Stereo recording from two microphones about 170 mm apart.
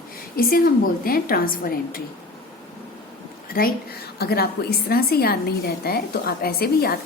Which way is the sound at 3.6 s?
60° left (ahead or behind).